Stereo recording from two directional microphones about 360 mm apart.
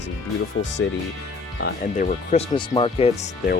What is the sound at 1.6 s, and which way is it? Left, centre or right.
Speech, left.